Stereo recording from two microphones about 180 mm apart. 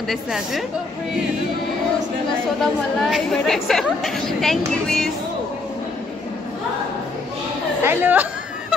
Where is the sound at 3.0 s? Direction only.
Centre (ahead or behind).